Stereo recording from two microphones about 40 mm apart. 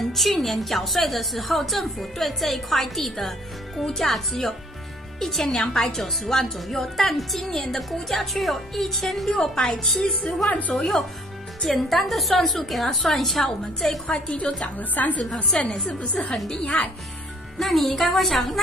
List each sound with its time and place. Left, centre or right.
0.0 s music: centre
0.3 s a woman's voice: centre
9.4 s a woman's voice: centre
14.5 s a woman's voice: centre
14.8 s a woman's voice: left
15.3 s a woman's voice: left
16.7 s speech: left
17.6 s a woman's voice: centre